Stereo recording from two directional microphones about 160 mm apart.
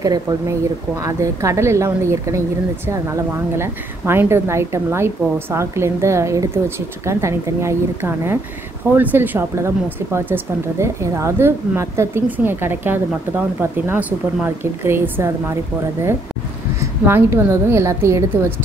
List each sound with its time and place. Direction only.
0.0 s a woman's voice: 20° right (ahead or behind)
16.8 s a woman's voice: 15° right (ahead or behind)